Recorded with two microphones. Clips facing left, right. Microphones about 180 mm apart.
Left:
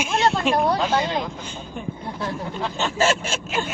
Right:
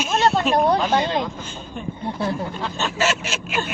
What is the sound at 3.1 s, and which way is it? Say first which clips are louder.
Speech: left 2 dB; 30° left (ahead or behind).